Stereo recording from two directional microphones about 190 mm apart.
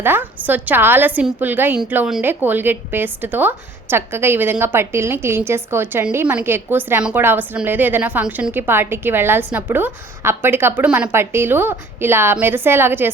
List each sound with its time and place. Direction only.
0.0 s a woman's voice: 10° right (ahead or behind)